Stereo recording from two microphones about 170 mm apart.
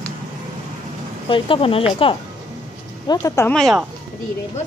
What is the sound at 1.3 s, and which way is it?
Speech, 30° left (ahead or behind).